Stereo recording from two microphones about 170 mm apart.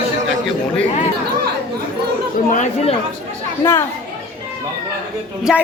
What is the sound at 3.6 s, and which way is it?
Speech, 15° left (ahead or behind).